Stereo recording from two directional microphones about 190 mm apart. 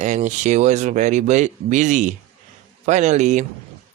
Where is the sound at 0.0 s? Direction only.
40° right (ahead or behind).